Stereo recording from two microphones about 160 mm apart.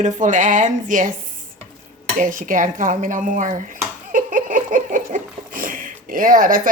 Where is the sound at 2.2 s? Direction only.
55° right (ahead or behind).